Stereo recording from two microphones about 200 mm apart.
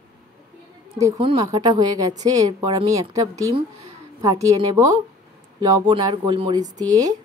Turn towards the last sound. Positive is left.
turn(degrees=-20)  # may be behind; listen again after turning